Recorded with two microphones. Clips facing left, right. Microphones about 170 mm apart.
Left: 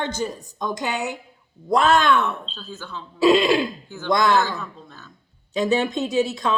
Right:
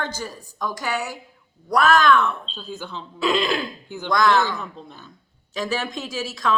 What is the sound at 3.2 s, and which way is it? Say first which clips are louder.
Speech: left 6 dB; 25° left (ahead or behind).